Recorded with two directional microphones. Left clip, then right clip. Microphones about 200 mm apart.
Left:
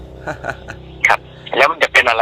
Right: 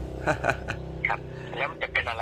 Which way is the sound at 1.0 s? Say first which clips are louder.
Left 16 dB; 45° left (ahead or behind).